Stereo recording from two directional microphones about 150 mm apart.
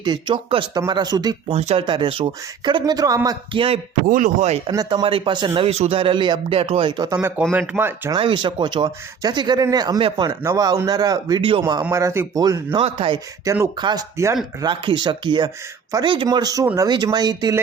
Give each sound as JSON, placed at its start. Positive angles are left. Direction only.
{"t": 0.0, "sound": "speech", "side_deg": -30}
{"t": 1.5, "sound": "speech", "side_deg": -45}
{"t": 1.9, "sound": "speech", "side_deg": -35}
{"t": 3.2, "sound": "speech", "side_deg": -35}
{"t": 4.1, "sound": "speech", "side_deg": -55}
{"t": 4.6, "sound": "speech", "side_deg": -30}
{"t": 5.5, "sound": "speech", "side_deg": -45}
{"t": 7.2, "sound": "speech", "side_deg": -15}
{"t": 8.1, "sound": "speech", "side_deg": -30}
{"t": 12.8, "sound": "speech", "side_deg": -35}
{"t": 13.4, "sound": "speech", "side_deg": -20}